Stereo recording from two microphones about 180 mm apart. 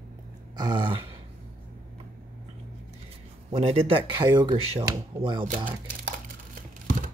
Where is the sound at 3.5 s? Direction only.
30° right (ahead or behind).